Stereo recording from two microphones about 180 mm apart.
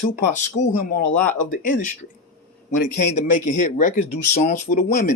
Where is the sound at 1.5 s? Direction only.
45° left (ahead or behind).